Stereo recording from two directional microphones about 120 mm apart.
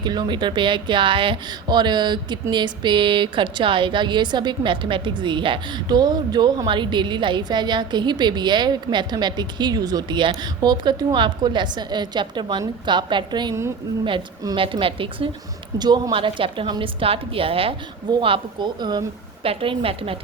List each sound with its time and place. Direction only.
0.0 s a woman's voice: 35° right (ahead or behind)
15.8 s a woman's voice: 35° right (ahead or behind)
19.5 s a woman's voice: 50° right (ahead or behind)